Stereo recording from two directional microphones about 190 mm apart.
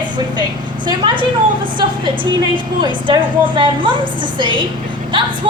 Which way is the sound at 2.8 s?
25° right (ahead or behind).